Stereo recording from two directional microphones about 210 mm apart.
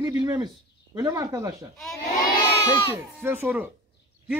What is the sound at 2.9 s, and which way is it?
Speech, 10° right (ahead or behind).